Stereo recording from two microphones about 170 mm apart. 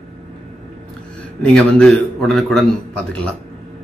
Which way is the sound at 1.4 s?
5° left (ahead or behind).